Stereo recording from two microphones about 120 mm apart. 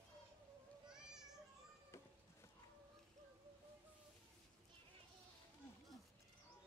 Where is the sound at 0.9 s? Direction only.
5° right (ahead or behind).